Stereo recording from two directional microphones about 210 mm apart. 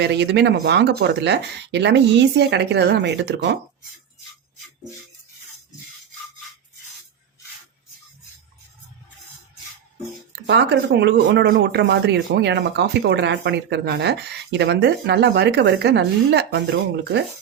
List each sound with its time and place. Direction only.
0.0 s speech: 55° right (ahead or behind)
10.4 s speech: 55° right (ahead or behind)